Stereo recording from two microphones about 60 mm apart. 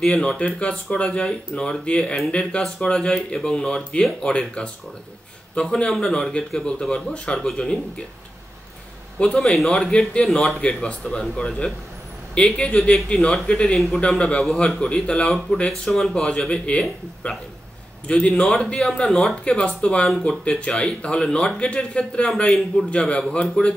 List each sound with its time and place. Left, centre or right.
0.1 s speech: centre
9.2 s speech: centre
18.2 s a man's voice: centre